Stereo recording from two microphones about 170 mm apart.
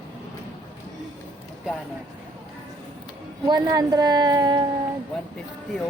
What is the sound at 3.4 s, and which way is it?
A woman's voice, 20° right (ahead or behind).